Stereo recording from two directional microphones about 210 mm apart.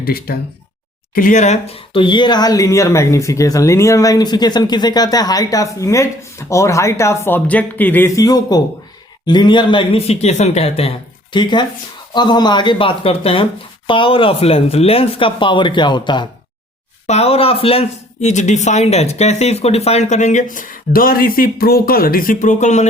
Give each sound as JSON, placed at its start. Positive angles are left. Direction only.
{"t": 0.0, "sound": "speech", "side_deg": 45}